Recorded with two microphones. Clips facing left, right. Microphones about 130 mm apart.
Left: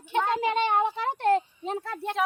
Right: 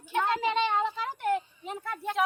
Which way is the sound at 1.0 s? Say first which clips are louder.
Left 5 dB; 75° left (ahead or behind).